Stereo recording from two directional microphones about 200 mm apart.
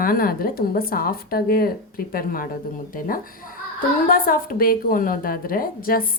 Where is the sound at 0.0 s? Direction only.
45° left (ahead or behind).